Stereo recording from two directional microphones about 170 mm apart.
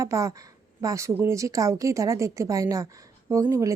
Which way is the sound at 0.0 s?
20° right (ahead or behind).